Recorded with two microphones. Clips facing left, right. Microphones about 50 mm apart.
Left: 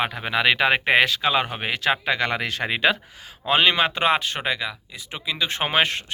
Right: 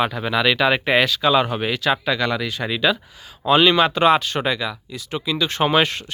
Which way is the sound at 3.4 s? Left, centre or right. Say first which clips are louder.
Right 4 dB; left.